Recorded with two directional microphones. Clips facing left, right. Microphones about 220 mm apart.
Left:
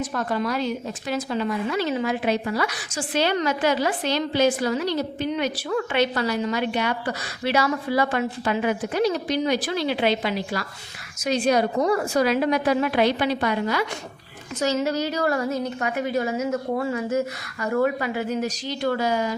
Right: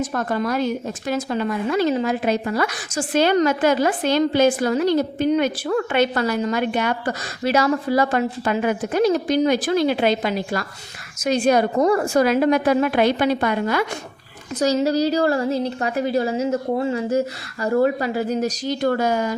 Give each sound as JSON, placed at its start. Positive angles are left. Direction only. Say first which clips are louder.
{"t": 0.0, "sound": "a woman's voice", "louder": "right 3 dB", "side_deg": -45}
{"t": 14.6, "sound": "a woman's voice", "louder": "right 5 dB", "side_deg": -35}